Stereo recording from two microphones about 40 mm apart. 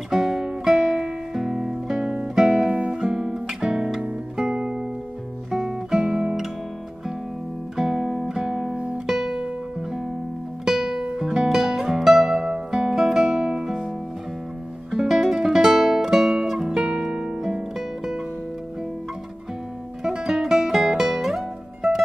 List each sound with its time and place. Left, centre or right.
0.1 s music: centre
4.6 s music: centre
5.6 s music: centre
7.7 s music: centre
8.7 s music: right
9.0 s music: centre
10.6 s music: centre
14.9 s guitar: centre
17.0 s harp: centre
17.7 s music: centre
20.0 s music: centre